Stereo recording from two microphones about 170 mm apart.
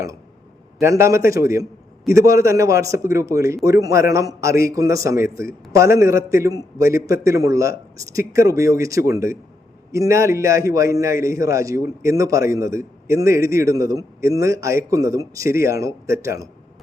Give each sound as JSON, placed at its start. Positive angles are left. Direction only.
{"t": 0.8, "sound": "a man's voice", "side_deg": -15}